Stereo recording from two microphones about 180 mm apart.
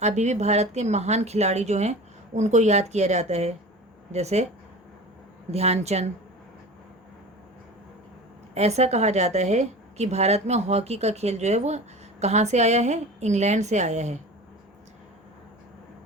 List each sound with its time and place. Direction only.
0.0 s speech: 40° right (ahead or behind)
5.5 s speech: 35° right (ahead or behind)
8.5 s speech: 35° right (ahead or behind)